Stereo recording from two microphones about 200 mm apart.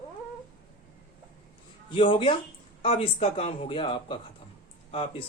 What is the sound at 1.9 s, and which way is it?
Speech, 25° left (ahead or behind).